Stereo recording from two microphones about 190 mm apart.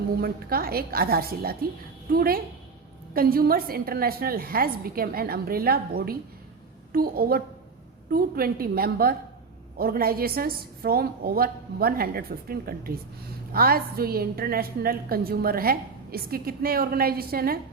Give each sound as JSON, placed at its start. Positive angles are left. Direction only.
{"t": 0.2, "sound": "a woman's voice", "side_deg": -50}